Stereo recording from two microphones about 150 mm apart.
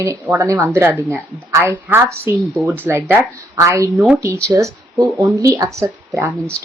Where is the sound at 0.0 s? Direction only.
20° right (ahead or behind).